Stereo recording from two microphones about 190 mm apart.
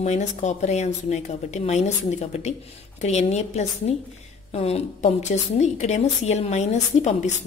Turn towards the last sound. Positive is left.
turn(degrees=35)  # may be behind; listen again after turning